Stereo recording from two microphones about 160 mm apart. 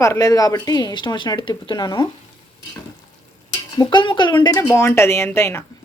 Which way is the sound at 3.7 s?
25° left (ahead or behind).